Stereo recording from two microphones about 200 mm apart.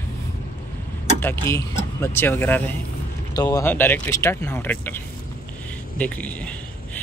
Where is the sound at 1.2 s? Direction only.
10° left (ahead or behind).